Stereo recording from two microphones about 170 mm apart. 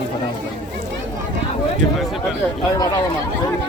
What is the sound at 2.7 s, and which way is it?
Speech, 20° left (ahead or behind).